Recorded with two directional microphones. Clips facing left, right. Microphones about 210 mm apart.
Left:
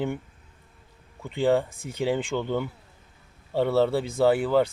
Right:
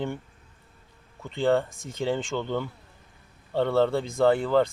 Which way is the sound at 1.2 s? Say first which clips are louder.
Left 1 dB; 10° left (ahead or behind).